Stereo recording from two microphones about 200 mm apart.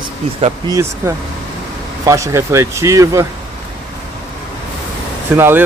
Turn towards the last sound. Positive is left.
turn(degrees=-10)  # may be behind; listen again after turning